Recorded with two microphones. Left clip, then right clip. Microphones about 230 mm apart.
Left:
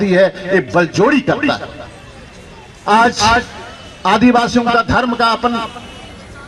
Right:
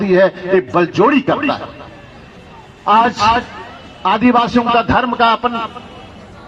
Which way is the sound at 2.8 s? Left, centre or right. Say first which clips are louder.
Even; left.